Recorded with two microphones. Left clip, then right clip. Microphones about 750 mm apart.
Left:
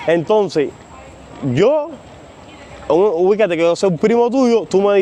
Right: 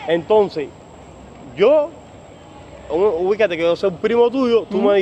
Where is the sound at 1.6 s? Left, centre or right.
Left.